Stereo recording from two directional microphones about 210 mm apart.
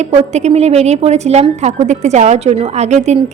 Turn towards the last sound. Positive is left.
turn(degrees=-35)  # may be behind; listen again after turning